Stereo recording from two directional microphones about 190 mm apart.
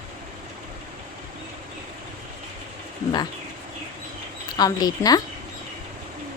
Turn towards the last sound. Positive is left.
turn(degrees=20)  # may be behind; listen again after turning